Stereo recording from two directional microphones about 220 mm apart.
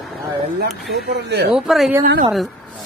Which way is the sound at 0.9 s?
50° right (ahead or behind).